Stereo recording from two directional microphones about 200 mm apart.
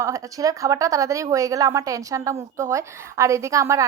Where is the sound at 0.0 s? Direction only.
15° right (ahead or behind).